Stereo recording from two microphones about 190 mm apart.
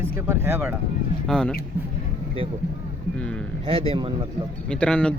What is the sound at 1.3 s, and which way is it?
Speech, 5° left (ahead or behind).